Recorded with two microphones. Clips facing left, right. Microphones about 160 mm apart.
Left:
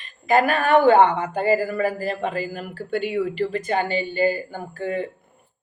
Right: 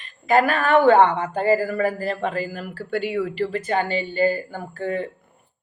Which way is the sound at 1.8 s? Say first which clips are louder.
Even; 15° left (ahead or behind).